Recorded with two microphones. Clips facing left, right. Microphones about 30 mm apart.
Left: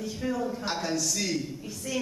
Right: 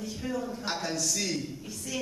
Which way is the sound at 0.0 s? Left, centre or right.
Centre.